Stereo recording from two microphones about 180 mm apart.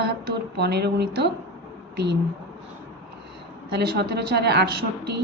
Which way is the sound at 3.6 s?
65° right (ahead or behind).